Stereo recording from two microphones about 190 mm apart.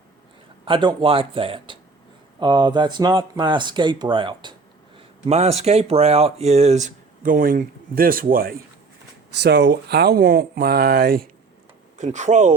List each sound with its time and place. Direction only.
0.6 s speech: 25° right (ahead or behind); by 8.5 s 50° right (ahead or behind)
9.4 s speech: 65° right (ahead or behind)
11.9 s speech: 40° right (ahead or behind)